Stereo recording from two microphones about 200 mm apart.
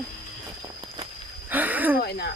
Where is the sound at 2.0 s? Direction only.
55° left (ahead or behind).